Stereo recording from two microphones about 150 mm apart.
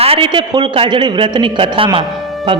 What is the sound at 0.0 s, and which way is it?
A man's voice, 35° right (ahead or behind).